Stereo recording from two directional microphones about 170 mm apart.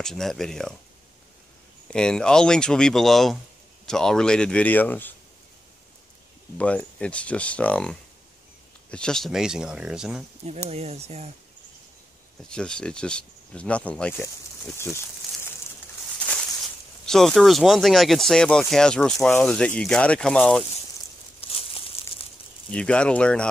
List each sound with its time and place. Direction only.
0.0 s speech: centre (ahead or behind)
1.9 s speech: 5° left (ahead or behind)
6.6 s speech: 5° left (ahead or behind)
10.4 s speech: 40° right (ahead or behind)
12.4 s speech: 5° left (ahead or behind)
15.2 s a sound: centre (ahead or behind)
17.0 s speech: centre (ahead or behind)
21.4 s crumpling: 35° left (ahead or behind)
22.7 s speech: 5° left (ahead or behind)